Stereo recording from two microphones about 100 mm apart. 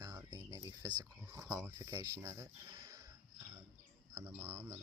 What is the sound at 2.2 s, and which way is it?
Speech, 25° right (ahead or behind).